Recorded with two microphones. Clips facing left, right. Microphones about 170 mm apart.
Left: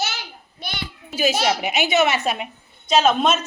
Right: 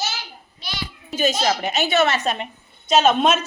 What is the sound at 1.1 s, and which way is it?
A child's voice, 10° left (ahead or behind).